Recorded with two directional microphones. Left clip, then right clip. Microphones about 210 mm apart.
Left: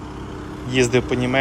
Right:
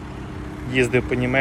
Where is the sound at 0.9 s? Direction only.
20° left (ahead or behind).